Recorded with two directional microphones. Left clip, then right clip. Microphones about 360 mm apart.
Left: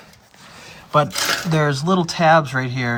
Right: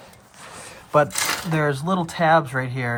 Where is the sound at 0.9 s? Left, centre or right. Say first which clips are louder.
Left 2 dB; centre.